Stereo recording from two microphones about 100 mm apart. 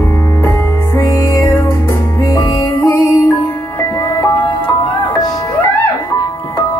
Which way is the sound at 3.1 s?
30° left (ahead or behind).